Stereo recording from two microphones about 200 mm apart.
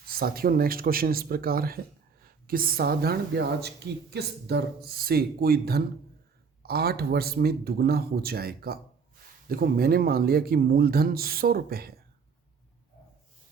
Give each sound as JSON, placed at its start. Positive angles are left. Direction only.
{"t": 0.0, "sound": "speech", "side_deg": -50}